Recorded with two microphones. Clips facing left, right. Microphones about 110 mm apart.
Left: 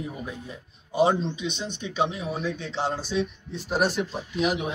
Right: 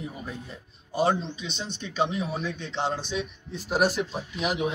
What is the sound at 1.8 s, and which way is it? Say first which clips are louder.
Speech: even; 10° left (ahead or behind).